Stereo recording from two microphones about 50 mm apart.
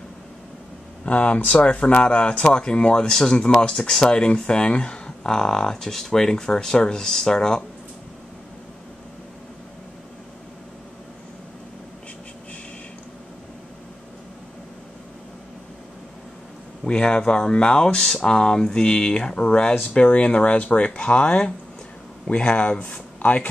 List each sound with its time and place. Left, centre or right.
1.0 s speech: left
16.8 s speech: centre